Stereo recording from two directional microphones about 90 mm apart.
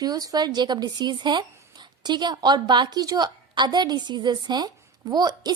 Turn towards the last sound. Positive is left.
turn(degrees=-50)  # may be behind; listen again after turning